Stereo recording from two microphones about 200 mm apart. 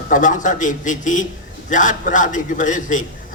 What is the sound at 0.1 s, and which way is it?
A man's voice, 40° left (ahead or behind).